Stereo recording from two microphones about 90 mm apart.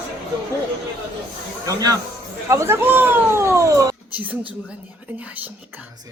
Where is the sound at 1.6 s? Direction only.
40° right (ahead or behind).